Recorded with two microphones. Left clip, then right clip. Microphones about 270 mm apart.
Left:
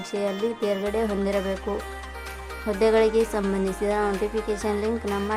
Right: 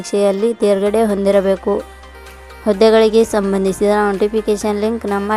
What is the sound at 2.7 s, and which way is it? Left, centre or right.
Speech, right.